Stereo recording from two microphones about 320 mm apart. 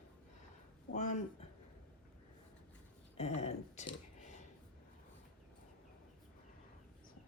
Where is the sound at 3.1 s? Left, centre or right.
Centre.